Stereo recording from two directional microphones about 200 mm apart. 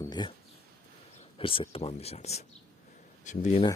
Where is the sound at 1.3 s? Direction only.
25° left (ahead or behind).